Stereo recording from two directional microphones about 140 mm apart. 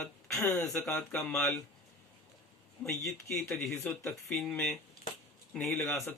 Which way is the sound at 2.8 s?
10° left (ahead or behind).